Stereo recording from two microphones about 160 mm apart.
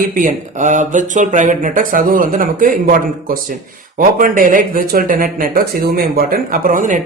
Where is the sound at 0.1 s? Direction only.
55° right (ahead or behind).